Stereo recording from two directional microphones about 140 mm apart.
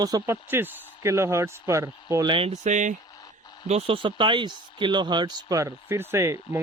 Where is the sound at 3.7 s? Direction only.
45° right (ahead or behind); by 6.6 s 20° right (ahead or behind).